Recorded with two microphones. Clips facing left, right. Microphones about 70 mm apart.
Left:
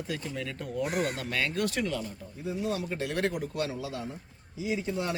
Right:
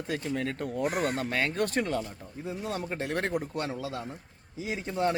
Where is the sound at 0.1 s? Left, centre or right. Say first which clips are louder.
Right 7 dB; right.